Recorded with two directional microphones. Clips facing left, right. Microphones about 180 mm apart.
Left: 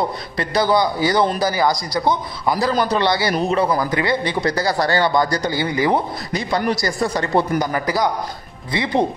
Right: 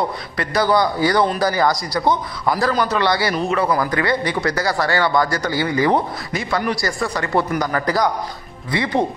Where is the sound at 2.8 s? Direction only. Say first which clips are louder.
Even; 35° left (ahead or behind); by 6.0 s 15° left (ahead or behind).